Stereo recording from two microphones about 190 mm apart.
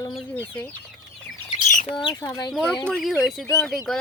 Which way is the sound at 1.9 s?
25° left (ahead or behind).